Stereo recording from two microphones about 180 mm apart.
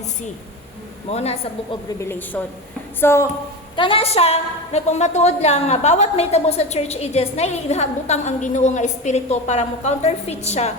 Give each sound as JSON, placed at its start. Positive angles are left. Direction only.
{"t": 1.1, "sound": "a woman's voice", "side_deg": 35}
{"t": 2.0, "sound": "a woman's voice", "side_deg": 10}
{"t": 3.8, "sound": "a woman's voice", "side_deg": 30}